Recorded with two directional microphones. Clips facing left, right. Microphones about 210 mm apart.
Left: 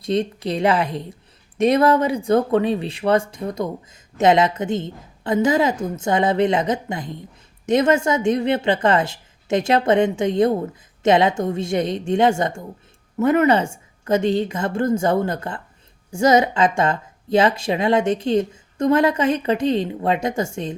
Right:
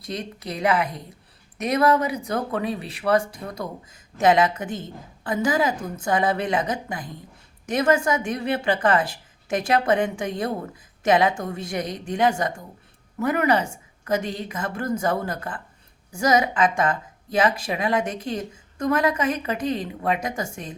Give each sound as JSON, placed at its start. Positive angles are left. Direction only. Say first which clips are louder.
{"t": 0.0, "sound": "speech", "louder": "left 10 dB", "side_deg": 25}